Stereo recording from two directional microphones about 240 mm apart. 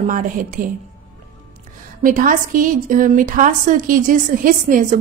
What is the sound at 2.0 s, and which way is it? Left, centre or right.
A woman's voice, right.